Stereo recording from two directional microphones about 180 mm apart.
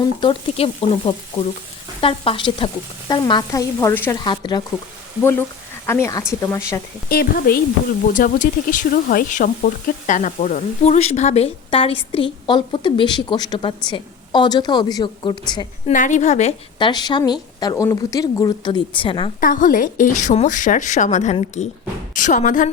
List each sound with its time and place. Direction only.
0.2 s speech: 30° left (ahead or behind); by 4.2 s 15° left (ahead or behind)
4.2 s speech: 25° left (ahead or behind)
5.2 s speech: 15° left (ahead or behind)
7.1 s a woman's voice: 55° left (ahead or behind); by 15.6 s 25° left (ahead or behind)
15.9 s speech: 45° left (ahead or behind)
16.7 s speech: 25° left (ahead or behind)
19.4 s a woman's voice: 50° left (ahead or behind)